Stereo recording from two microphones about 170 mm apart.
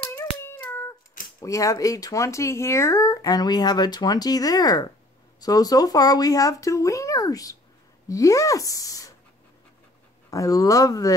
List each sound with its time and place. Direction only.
0.1 s a sound: 15° left (ahead or behind)
1.4 s speech: 20° left (ahead or behind)
10.3 s speech: 20° left (ahead or behind)